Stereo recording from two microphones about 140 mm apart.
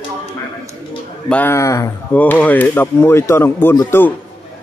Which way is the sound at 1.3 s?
15° left (ahead or behind).